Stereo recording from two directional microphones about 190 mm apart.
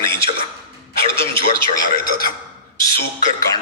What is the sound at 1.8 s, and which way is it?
Speech, 50° left (ahead or behind).